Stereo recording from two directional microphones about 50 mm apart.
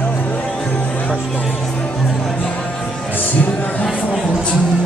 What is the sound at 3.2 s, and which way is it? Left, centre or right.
Music, left.